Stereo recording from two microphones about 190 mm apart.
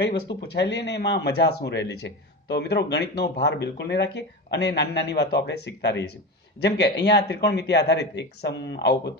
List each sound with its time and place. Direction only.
0.0 s speech: 65° left (ahead or behind)